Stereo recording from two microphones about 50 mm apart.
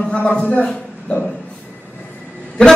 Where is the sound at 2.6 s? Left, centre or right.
Left.